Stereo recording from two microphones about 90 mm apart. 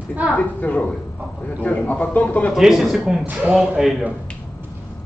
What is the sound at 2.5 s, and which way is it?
Speech, 5° right (ahead or behind).